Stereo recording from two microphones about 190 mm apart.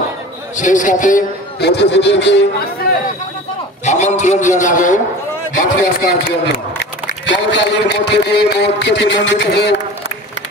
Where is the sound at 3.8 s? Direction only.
40° left (ahead or behind).